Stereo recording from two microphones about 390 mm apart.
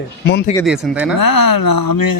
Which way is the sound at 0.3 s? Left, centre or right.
Left.